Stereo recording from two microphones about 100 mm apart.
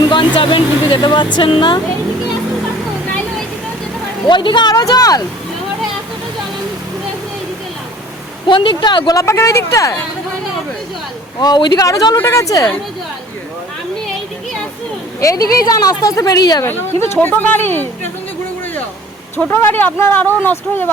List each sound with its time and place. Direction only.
0.1 s speech: 55° left (ahead or behind)
4.3 s a woman's voice: 50° left (ahead or behind)
8.4 s speech: 55° left (ahead or behind)
9.1 s a woman's voice: 30° left (ahead or behind)
11.3 s a woman's voice: 45° left (ahead or behind)
12.1 s a woman's voice: 25° left (ahead or behind)
15.2 s a woman's voice: 35° left (ahead or behind)
17.2 s speech: 20° left (ahead or behind)
19.5 s speech: 20° left (ahead or behind)